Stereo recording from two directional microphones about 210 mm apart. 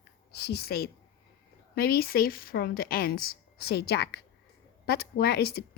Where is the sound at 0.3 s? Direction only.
50° left (ahead or behind).